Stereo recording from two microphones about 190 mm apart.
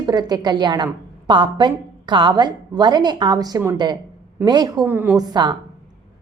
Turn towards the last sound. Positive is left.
turn(degrees=-20)  # may be behind; listen again after turning